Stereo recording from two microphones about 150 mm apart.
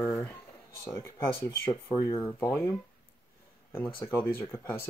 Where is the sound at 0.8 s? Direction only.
20° left (ahead or behind).